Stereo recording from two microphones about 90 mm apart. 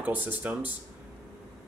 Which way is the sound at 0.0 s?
20° right (ahead or behind).